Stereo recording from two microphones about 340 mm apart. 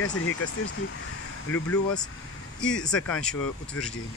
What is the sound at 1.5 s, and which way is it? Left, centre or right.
Speech, centre.